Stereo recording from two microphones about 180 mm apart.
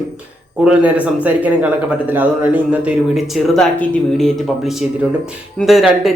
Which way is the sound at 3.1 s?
Centre (ahead or behind).